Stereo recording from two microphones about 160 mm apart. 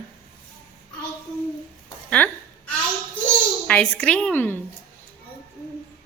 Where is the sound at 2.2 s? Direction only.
10° left (ahead or behind).